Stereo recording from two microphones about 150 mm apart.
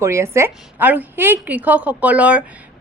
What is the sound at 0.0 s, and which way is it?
A woman's voice, 20° right (ahead or behind).